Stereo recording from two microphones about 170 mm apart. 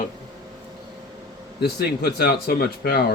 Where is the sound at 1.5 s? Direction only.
70° left (ahead or behind).